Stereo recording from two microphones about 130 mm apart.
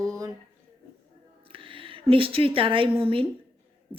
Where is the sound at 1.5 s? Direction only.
40° right (ahead or behind).